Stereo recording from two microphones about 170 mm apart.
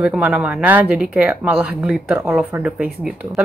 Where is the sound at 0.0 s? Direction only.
10° right (ahead or behind).